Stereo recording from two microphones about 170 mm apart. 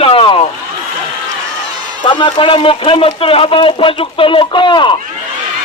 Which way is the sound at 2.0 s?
30° left (ahead or behind).